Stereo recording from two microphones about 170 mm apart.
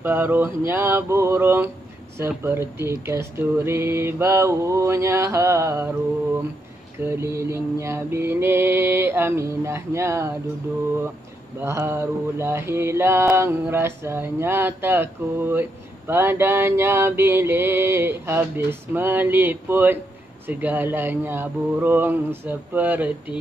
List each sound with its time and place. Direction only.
0.0 s mantra: 10° right (ahead or behind)
7.1 s mantra: 15° right (ahead or behind)
11.6 s mantra: 15° right (ahead or behind)